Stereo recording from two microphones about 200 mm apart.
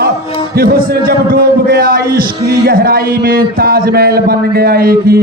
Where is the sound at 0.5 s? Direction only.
45° right (ahead or behind).